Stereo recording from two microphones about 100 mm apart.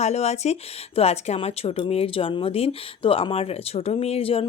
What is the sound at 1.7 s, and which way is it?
Speech, 70° left (ahead or behind).